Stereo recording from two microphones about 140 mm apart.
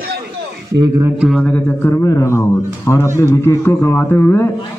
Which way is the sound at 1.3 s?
10° left (ahead or behind).